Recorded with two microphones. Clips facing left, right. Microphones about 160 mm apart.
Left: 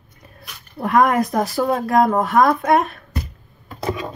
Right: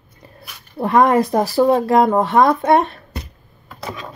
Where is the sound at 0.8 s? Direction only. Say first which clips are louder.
Right 2 dB; 30° right (ahead or behind).